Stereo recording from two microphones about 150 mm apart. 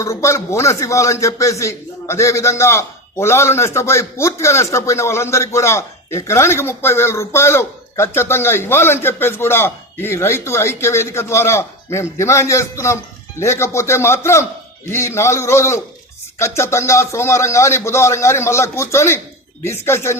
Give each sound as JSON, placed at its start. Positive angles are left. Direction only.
{"t": 0.0, "sound": "a man's voice", "side_deg": 20}